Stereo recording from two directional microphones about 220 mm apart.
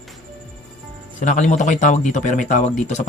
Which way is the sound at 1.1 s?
35° left (ahead or behind).